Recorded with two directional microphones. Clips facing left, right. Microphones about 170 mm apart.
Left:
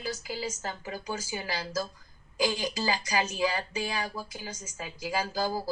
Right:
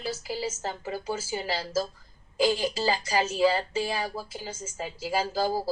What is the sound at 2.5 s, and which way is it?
A woman's voice, 30° right (ahead or behind).